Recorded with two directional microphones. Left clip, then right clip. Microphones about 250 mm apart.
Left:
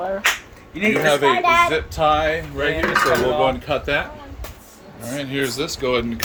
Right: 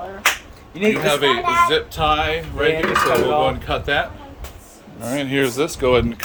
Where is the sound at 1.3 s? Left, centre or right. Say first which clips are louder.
Left 2 dB; left.